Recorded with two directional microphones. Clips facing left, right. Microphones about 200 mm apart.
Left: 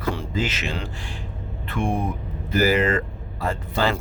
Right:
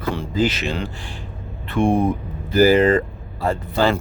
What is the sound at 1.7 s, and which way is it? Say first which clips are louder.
Speech: right 7 dB; 30° right (ahead or behind).